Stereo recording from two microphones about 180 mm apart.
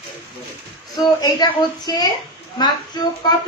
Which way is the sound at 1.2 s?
20° left (ahead or behind).